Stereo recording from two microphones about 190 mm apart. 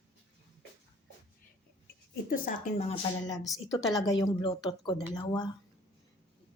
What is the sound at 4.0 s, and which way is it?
Speech, 20° left (ahead or behind).